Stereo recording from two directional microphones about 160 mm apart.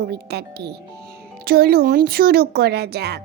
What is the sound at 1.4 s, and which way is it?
A woman's voice, 75° right (ahead or behind).